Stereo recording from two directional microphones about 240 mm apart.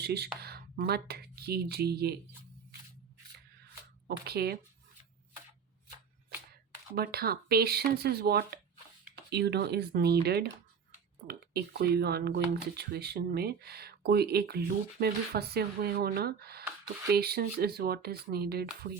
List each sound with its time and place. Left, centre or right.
0.0 s speech: right
4.3 s speech: right
6.9 s speech: right